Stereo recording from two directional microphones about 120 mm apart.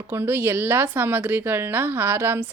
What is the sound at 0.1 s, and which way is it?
Speech, 20° right (ahead or behind).